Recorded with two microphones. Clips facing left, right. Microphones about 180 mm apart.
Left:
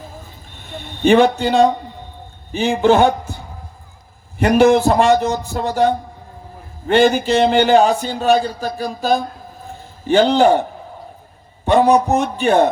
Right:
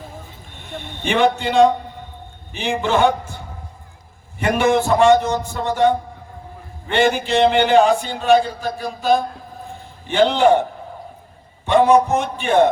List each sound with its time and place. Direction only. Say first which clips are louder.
1.0 s speech: left 5 dB; 40° left (ahead or behind)
4.4 s speech: left 5 dB; 40° left (ahead or behind)
11.6 s speech: left 1 dB; 40° left (ahead or behind)